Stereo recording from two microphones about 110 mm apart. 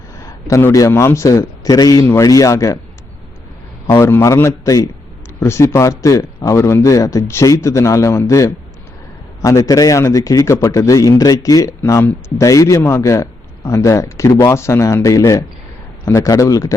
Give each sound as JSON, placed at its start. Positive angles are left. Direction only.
{"t": 0.4, "sound": "speech", "side_deg": 30}
{"t": 3.8, "sound": "speech", "side_deg": 25}
{"t": 11.8, "sound": "speech", "side_deg": 20}